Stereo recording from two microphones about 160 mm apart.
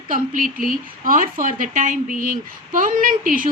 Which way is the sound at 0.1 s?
55° right (ahead or behind).